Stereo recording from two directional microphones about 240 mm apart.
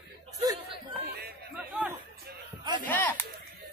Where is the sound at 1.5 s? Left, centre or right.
Centre.